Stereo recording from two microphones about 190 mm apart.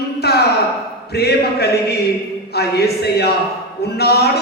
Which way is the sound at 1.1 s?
55° left (ahead or behind).